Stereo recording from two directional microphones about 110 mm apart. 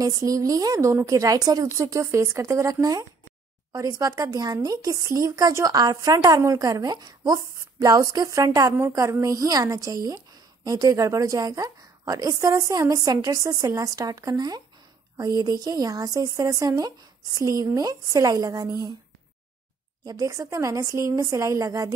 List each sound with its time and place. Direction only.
0.0 s speech: 30° right (ahead or behind)
20.1 s speech: 30° right (ahead or behind)